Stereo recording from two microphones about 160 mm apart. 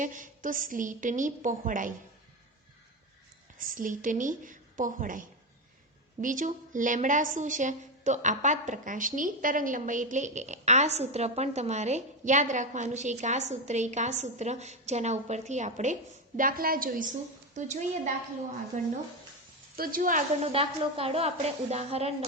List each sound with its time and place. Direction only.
0.0 s a woman's voice: 55° right (ahead or behind)
3.6 s a woman's voice: 60° right (ahead or behind)
6.2 s a woman's voice: 55° right (ahead or behind)
16.4 s a woman's voice: 65° right (ahead or behind)
19.7 s a woman's voice: 65° right (ahead or behind)
20.4 s a woman's voice: 40° right (ahead or behind)